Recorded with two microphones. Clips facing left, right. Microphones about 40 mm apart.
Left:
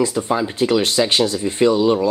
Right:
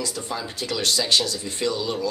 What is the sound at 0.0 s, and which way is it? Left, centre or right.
Speech, left.